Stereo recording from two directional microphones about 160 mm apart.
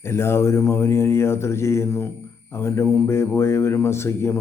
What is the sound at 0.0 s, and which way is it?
Speech, 15° left (ahead or behind).